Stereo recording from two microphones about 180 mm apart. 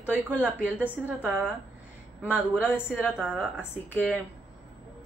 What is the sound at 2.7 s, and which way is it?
Speech, 10° left (ahead or behind).